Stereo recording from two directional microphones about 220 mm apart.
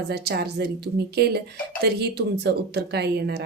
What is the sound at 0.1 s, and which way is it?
A woman's voice, 45° right (ahead or behind).